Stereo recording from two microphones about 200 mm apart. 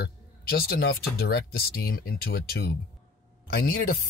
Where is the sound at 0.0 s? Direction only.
50° left (ahead or behind).